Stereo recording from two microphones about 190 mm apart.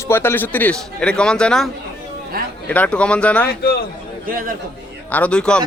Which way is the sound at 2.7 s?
5° left (ahead or behind).